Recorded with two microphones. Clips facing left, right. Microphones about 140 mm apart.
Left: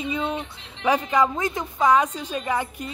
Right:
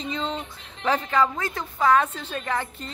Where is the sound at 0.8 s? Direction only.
15° left (ahead or behind).